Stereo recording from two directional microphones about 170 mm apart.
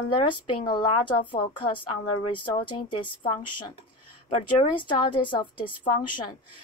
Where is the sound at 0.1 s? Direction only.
30° left (ahead or behind).